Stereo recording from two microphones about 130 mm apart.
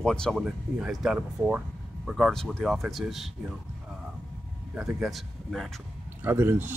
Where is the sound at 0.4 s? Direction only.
5° right (ahead or behind).